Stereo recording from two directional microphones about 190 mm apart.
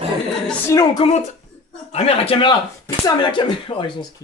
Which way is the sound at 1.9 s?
30° left (ahead or behind).